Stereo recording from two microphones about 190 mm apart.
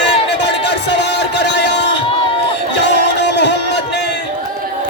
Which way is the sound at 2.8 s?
65° left (ahead or behind).